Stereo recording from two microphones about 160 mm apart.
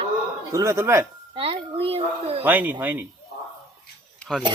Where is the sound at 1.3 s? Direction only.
35° right (ahead or behind).